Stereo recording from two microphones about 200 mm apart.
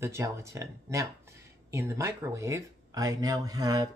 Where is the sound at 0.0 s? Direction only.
15° right (ahead or behind).